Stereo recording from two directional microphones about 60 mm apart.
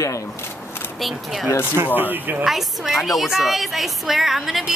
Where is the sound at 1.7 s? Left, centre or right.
Right.